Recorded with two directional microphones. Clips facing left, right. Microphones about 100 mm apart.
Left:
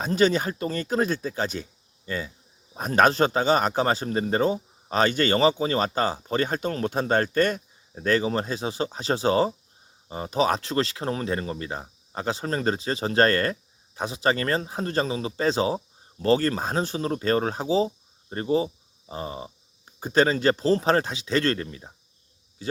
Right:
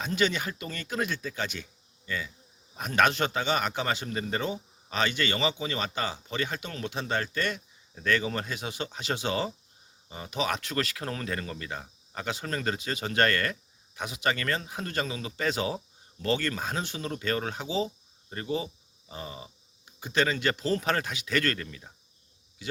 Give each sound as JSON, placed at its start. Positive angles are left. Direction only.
{"t": 0.0, "sound": "speech", "side_deg": 40}